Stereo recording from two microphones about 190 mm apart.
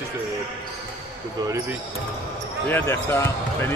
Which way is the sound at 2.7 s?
10° left (ahead or behind).